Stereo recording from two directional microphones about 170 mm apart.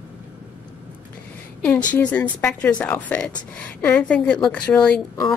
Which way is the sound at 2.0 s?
10° left (ahead or behind).